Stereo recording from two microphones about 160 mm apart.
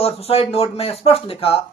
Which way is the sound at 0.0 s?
40° left (ahead or behind).